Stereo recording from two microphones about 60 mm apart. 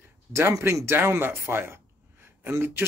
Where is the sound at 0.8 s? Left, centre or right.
Right.